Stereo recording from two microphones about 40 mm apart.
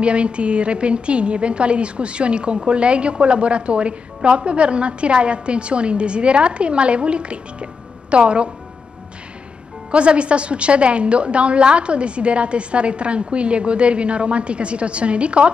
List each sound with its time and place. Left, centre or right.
0.0 s a woman's voice: right
9.8 s a woman's voice: right